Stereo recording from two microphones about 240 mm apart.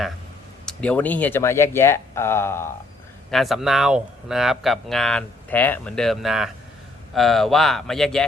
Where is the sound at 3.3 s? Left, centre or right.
Centre.